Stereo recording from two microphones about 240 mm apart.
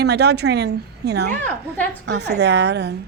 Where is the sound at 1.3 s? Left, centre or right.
Centre.